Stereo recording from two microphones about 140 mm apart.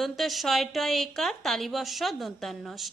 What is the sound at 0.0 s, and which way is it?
A woman's voice, centre (ahead or behind).